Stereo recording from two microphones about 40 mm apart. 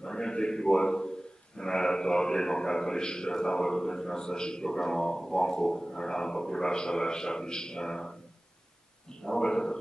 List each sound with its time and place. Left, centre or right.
0.0 s a man's voice: centre
9.2 s a man's voice: centre